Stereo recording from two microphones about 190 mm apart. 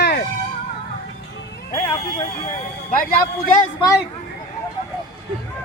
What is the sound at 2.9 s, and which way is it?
Speech, 50° left (ahead or behind).